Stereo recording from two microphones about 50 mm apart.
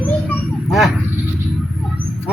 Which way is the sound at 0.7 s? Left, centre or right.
Centre.